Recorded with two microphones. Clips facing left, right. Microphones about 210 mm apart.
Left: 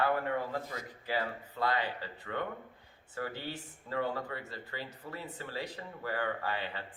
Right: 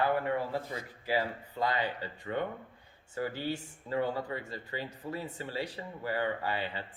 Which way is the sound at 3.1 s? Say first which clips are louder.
Right 5 dB; 15° right (ahead or behind).